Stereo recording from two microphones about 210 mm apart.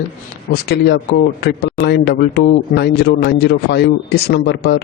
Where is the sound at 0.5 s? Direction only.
50° left (ahead or behind).